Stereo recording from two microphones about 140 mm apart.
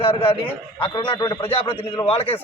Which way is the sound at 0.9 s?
30° left (ahead or behind).